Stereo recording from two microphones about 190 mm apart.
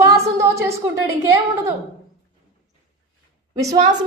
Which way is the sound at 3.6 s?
20° right (ahead or behind).